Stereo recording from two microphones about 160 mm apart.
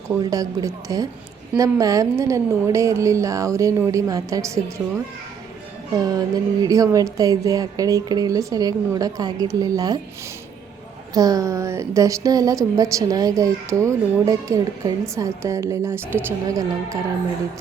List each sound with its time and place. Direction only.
0.2 s a woman's voice: 20° right (ahead or behind)
6.0 s a woman's voice: 25° right (ahead or behind)
11.1 s a woman's voice: 25° right (ahead or behind)